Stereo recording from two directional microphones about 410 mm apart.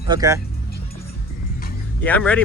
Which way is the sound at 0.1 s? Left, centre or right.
Centre.